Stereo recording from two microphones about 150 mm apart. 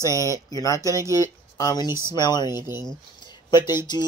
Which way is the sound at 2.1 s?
30° left (ahead or behind).